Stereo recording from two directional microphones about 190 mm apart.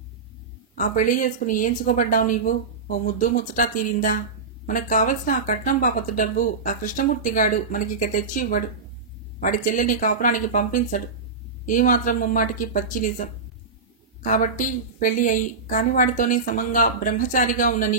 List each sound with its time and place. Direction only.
0.7 s speech: 45° left (ahead or behind)